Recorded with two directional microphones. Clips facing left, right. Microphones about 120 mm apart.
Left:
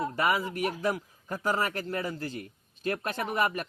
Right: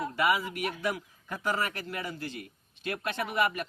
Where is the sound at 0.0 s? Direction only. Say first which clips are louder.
Even; 40° left (ahead or behind).